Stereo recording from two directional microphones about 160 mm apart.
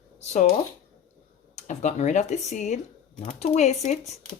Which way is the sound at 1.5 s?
50° left (ahead or behind).